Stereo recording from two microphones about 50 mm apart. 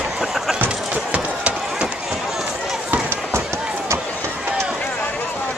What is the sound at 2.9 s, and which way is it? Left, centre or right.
Chop, right.